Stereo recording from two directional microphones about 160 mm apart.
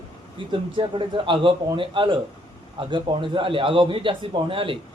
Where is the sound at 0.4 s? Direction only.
30° right (ahead or behind).